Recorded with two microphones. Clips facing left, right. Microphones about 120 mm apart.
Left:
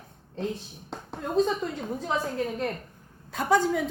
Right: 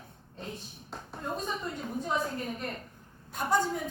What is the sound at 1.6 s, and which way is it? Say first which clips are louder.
A woman's voice: left 4 dB; 75° left (ahead or behind).